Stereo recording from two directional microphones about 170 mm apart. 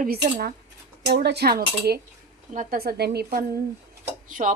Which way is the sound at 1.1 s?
70° right (ahead or behind).